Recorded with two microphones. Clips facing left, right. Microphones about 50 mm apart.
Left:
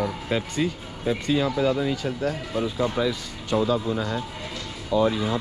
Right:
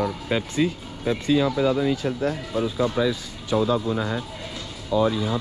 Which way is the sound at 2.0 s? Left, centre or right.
Right.